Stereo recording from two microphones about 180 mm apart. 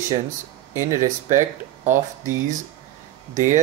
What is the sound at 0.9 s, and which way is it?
Speech, 45° right (ahead or behind).